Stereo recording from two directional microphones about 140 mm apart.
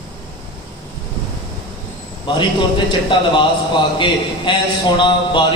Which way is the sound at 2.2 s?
35° left (ahead or behind).